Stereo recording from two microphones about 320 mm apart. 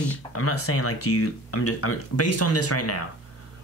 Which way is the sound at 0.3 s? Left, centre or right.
Left.